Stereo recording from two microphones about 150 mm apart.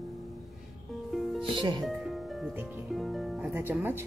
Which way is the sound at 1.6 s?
30° right (ahead or behind).